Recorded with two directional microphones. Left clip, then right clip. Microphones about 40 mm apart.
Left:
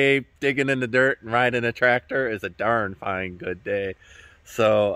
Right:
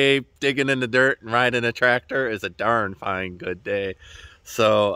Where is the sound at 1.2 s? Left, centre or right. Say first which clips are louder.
Right 1 dB; centre.